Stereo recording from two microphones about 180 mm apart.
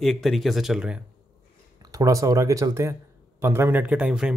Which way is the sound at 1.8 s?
20° right (ahead or behind).